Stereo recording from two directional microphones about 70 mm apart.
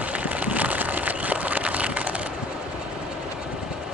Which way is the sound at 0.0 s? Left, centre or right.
Right.